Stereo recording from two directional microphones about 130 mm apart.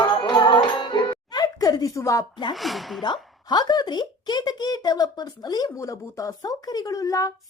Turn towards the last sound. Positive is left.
turn(degrees=25)  # may be behind; listen again after turning